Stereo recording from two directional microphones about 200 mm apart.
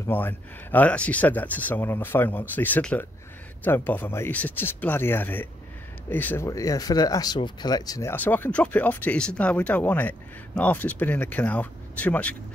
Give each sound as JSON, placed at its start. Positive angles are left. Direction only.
{"t": 0.0, "sound": "speech", "side_deg": 10}